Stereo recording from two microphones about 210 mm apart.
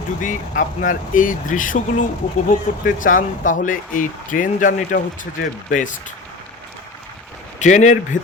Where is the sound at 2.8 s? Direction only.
40° left (ahead or behind).